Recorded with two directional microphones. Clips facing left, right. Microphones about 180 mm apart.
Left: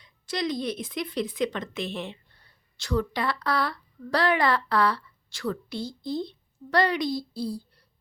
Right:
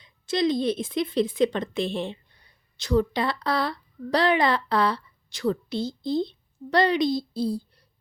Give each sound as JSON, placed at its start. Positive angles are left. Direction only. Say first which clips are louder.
{"t": 0.0, "sound": "a woman's voice", "louder": "right 6 dB", "side_deg": -25}
{"t": 2.3, "sound": "speech", "louder": "even", "side_deg": -20}